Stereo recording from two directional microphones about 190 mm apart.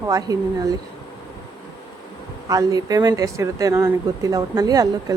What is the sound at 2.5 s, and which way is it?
Speech, 20° right (ahead or behind).